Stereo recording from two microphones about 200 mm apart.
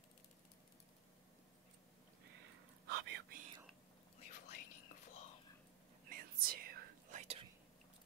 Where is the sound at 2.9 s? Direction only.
55° right (ahead or behind).